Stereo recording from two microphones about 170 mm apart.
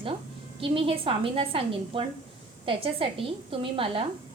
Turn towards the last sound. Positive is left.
turn(degrees=-30)  # may be behind; listen again after turning